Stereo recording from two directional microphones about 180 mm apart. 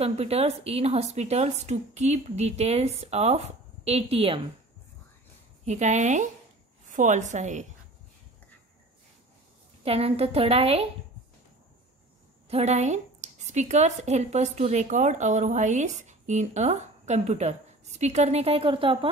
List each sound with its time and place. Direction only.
0.0 s a woman's voice: 35° right (ahead or behind)
5.7 s a woman's voice: 40° right (ahead or behind)
9.8 s a woman's voice: 35° right (ahead or behind)
12.4 s a woman's voice: 35° right (ahead or behind)